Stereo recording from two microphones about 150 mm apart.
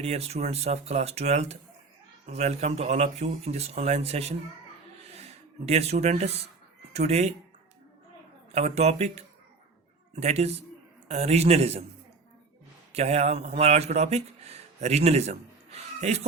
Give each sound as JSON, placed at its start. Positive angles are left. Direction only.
{"t": 0.0, "sound": "speech", "side_deg": -45}
{"t": 5.6, "sound": "speech", "side_deg": -45}
{"t": 8.5, "sound": "speech", "side_deg": -45}
{"t": 12.9, "sound": "speech", "side_deg": -45}